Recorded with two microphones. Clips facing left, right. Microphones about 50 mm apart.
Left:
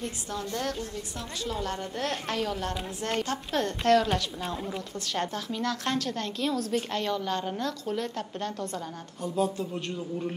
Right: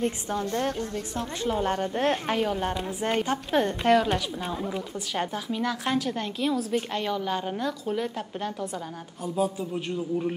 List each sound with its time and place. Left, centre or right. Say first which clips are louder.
0.0 s a woman's voice: right 6 dB; right; by 10.3 s centre